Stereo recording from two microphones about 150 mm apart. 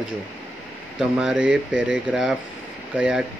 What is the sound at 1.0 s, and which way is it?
Speech, 5° right (ahead or behind).